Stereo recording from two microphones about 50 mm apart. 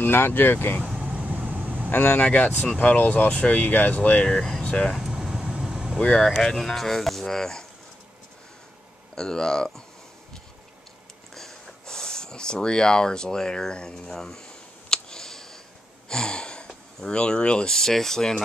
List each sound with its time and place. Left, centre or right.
0.0 s speech: left
0.9 s vehicle: right
1.9 s speech: left
4.4 s speech: centre
4.6 s speech: centre
5.2 s vehicle: centre
6.5 s speech: centre
9.1 s speech: centre
11.3 s a sound: centre
16.1 s speech: centre
17.7 s speech: centre